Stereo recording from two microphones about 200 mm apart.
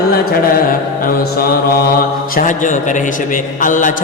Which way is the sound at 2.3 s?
40° left (ahead or behind).